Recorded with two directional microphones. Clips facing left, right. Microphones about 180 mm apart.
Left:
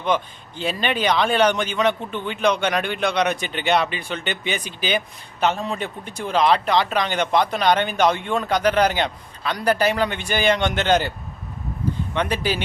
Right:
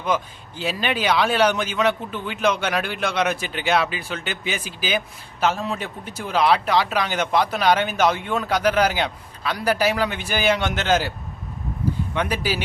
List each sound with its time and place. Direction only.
0.0 s speech: 5° right (ahead or behind)
12.1 s speech: 10° right (ahead or behind)